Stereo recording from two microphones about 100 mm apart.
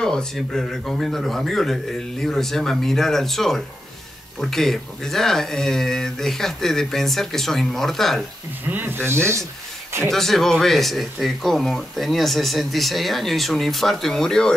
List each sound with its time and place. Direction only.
0.0 s speech: 5° left (ahead or behind)
8.6 s speech: 20° right (ahead or behind)
10.1 s speech: 5° left (ahead or behind)